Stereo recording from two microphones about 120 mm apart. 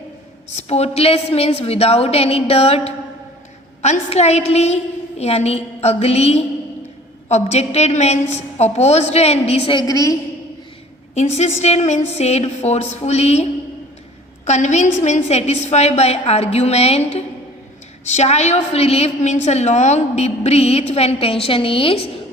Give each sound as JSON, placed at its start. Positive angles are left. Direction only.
{"t": 0.5, "sound": "a woman's voice", "side_deg": 60}
{"t": 9.7, "sound": "a woman's voice", "side_deg": 30}
{"t": 11.1, "sound": "a woman's voice", "side_deg": 70}